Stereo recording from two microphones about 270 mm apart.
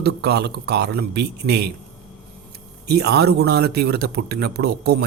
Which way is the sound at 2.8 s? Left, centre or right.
Right.